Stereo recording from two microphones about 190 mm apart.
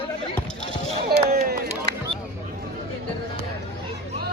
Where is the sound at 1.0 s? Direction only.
55° right (ahead or behind).